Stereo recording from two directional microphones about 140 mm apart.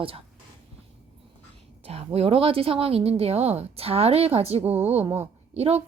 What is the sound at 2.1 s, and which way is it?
Speech, 45° right (ahead or behind).